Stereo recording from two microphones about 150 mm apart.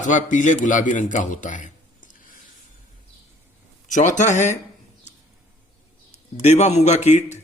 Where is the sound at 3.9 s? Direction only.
55° left (ahead or behind).